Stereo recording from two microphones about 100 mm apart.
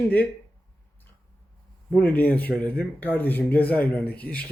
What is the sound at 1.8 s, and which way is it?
Speech, 15° left (ahead or behind).